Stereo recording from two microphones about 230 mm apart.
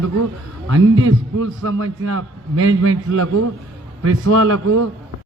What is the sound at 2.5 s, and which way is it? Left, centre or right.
A man's voice, right.